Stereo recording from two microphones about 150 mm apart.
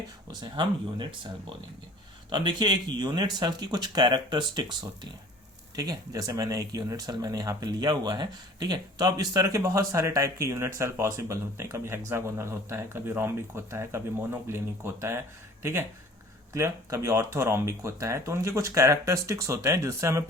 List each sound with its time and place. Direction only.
0.3 s speech: 30° right (ahead or behind)
2.3 s speech: 30° right (ahead or behind)
16.6 s speech: 20° right (ahead or behind)